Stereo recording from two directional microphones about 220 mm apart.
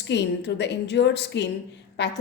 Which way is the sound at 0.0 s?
50° left (ahead or behind).